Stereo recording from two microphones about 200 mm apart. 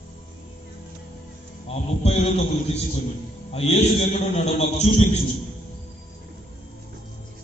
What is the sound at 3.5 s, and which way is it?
A man's voice, 30° left (ahead or behind).